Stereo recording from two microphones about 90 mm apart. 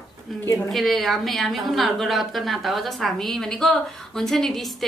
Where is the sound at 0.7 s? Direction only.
Centre (ahead or behind).